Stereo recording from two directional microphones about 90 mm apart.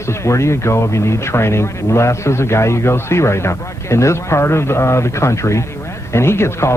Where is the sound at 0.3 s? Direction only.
30° left (ahead or behind).